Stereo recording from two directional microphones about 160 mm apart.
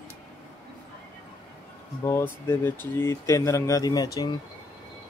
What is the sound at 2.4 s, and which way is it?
Speech, 15° left (ahead or behind).